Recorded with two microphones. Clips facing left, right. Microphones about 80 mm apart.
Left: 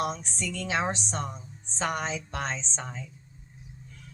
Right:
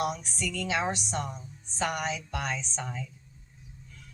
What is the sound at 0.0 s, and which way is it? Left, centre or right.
Speech, left.